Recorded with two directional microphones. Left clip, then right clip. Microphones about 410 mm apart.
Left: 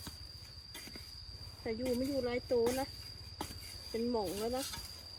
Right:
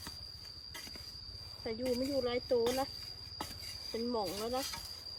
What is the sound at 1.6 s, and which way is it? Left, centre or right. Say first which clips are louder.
Speech: even; centre.